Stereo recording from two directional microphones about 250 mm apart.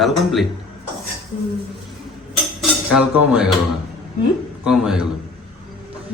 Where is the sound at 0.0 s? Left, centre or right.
Centre.